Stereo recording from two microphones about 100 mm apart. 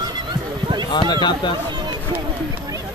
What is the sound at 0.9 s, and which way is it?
Speech, 50° left (ahead or behind).